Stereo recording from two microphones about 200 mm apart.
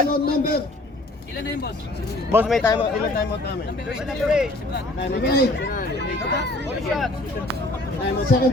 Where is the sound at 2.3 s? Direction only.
10° right (ahead or behind).